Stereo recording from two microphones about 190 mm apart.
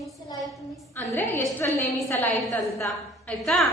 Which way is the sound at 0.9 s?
10° left (ahead or behind).